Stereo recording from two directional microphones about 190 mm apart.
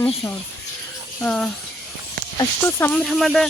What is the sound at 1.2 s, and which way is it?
Speech, 5° left (ahead or behind).